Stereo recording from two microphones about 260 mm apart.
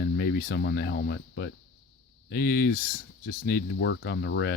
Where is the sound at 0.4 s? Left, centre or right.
Left.